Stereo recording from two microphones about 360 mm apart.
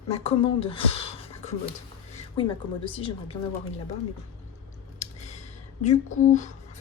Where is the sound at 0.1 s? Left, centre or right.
Centre.